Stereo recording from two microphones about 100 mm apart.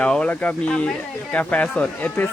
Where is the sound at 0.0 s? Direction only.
10° left (ahead or behind).